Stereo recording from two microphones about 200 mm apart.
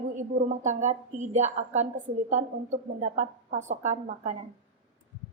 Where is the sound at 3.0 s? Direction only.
40° right (ahead or behind).